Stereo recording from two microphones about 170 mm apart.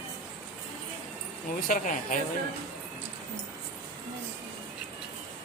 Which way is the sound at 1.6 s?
55° left (ahead or behind).